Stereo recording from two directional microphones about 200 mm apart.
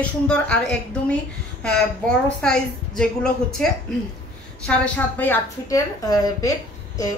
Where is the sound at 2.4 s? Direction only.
5° left (ahead or behind).